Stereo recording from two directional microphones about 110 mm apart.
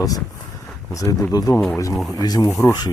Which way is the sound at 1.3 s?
35° left (ahead or behind).